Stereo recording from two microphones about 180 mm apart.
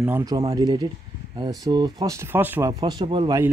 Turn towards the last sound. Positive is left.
turn(degrees=-25)  # may be behind; listen again after turning